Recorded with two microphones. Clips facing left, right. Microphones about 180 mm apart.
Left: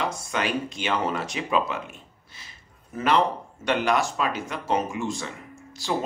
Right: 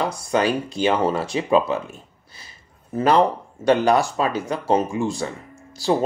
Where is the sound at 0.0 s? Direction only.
35° right (ahead or behind).